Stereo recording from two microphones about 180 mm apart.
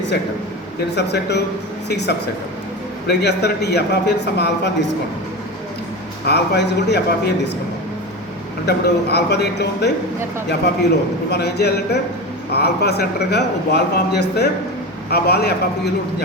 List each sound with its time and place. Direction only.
0.9 s a man's voice: 70° left (ahead or behind)
6.2 s a man's voice: 65° left (ahead or behind)
8.6 s a man's voice: 65° left (ahead or behind)
11.3 s a man's voice: 65° left (ahead or behind)